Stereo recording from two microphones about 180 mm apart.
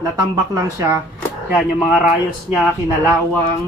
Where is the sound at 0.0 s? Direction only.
20° right (ahead or behind).